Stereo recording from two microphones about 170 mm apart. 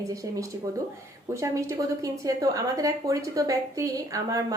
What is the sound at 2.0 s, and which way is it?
A woman's voice, 20° right (ahead or behind).